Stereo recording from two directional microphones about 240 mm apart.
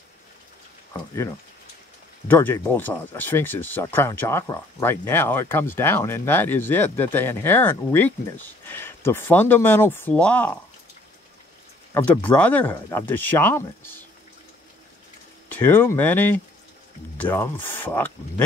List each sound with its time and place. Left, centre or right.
2.2 s speech: centre
11.9 s speech: centre
15.4 s speech: centre